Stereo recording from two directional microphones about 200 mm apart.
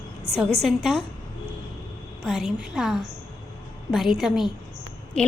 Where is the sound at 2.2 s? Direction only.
Centre (ahead or behind).